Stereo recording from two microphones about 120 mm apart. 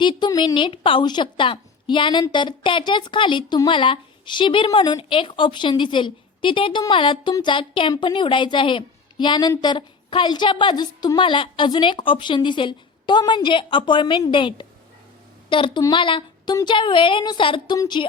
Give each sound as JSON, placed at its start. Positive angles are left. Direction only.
{"t": 0.0, "sound": "a woman's voice", "side_deg": 40}